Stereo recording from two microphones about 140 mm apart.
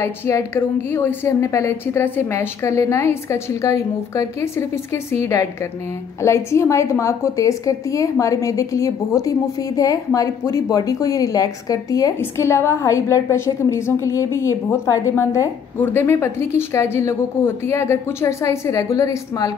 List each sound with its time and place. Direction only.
0.0 s a woman's voice: 20° left (ahead or behind)